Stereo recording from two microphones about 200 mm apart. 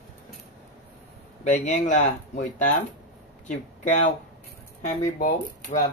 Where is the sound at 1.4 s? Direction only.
35° left (ahead or behind).